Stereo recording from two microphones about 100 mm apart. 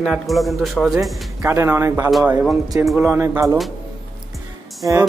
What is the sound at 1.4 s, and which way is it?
Speech, 25° right (ahead or behind).